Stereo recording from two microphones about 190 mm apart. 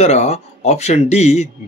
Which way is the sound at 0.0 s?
35° left (ahead or behind).